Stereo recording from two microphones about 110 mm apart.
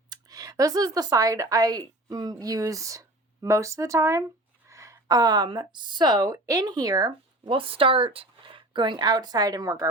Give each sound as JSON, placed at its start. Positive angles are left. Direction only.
{"t": 0.1, "sound": "a woman's voice", "side_deg": -35}
{"t": 7.4, "sound": "speech", "side_deg": -55}